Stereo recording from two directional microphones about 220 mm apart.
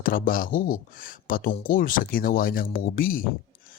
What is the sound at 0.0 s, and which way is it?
Speech, 40° left (ahead or behind).